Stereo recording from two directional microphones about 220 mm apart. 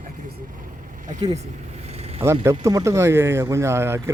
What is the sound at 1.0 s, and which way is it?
Vehicle, 30° right (ahead or behind).